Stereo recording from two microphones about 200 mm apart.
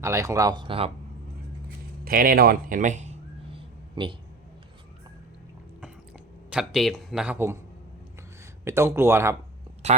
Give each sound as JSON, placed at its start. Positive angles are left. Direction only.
{"t": 0.0, "sound": "speech", "side_deg": -15}
{"t": 2.0, "sound": "a sound", "side_deg": -45}
{"t": 6.5, "sound": "a man's voice", "side_deg": -5}
{"t": 8.6, "sound": "speech", "side_deg": -15}
{"t": 9.8, "sound": "speech", "side_deg": -35}